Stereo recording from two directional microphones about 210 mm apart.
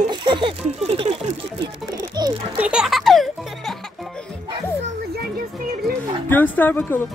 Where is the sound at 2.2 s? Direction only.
20° right (ahead or behind).